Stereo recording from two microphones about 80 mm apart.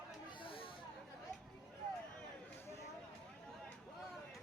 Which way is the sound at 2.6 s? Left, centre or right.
Left.